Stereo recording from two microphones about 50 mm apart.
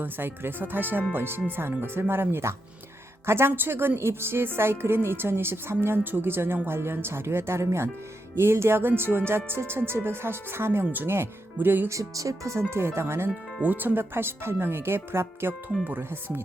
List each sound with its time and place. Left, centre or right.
0.0 s a woman's voice: right
8.4 s music: right
8.9 s a woman's voice: right
11.5 s speech: right
11.9 s speech: right
12.7 s music: right
13.2 s a woman's voice: right